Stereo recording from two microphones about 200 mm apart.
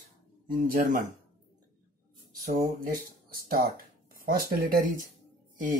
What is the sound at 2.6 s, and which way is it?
Speech, 45° right (ahead or behind).